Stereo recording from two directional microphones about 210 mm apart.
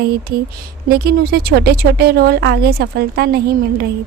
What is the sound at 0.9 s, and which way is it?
A woman's voice, 50° right (ahead or behind).